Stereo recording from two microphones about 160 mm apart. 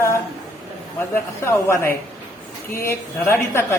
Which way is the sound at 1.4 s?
15° left (ahead or behind).